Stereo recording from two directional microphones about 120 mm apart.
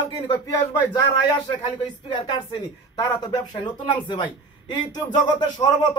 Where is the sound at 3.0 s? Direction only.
35° left (ahead or behind).